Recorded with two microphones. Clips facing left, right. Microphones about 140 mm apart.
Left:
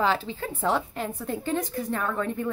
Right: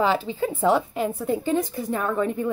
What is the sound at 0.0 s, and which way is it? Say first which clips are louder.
Speech: right 4 dB; 5° right (ahead or behind).